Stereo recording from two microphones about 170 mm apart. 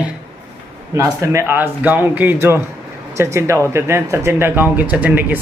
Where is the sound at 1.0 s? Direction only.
15° right (ahead or behind).